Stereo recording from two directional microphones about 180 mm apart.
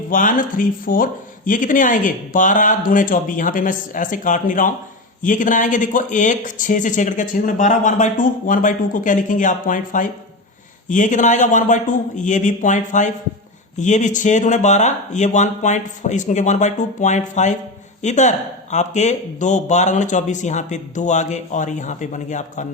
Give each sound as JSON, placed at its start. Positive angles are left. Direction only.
{"t": 0.1, "sound": "speech", "side_deg": 50}